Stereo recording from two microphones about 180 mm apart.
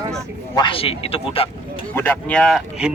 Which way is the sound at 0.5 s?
25° left (ahead or behind).